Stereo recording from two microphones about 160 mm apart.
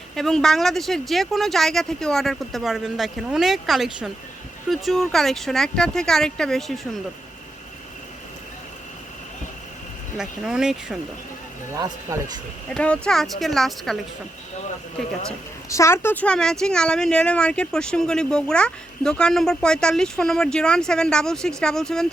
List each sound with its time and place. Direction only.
0.2 s speech: centre (ahead or behind)
10.2 s speech: 5° right (ahead or behind)
11.7 s speech: 20° right (ahead or behind)
12.6 s speech: 5° left (ahead or behind)
15.7 s speech: 15° left (ahead or behind)